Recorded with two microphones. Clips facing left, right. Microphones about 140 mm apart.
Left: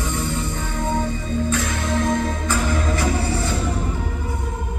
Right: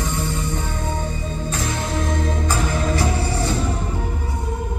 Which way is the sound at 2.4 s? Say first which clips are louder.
Even; 35° right (ahead or behind).